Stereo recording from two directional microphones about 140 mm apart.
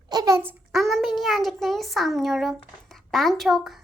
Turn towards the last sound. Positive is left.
turn(degrees=0)  # may be behind; listen again after turning